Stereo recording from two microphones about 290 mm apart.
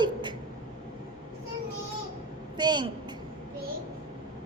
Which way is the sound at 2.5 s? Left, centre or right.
Centre.